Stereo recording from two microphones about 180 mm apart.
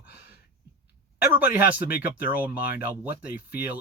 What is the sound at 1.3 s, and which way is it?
Speech, 10° right (ahead or behind).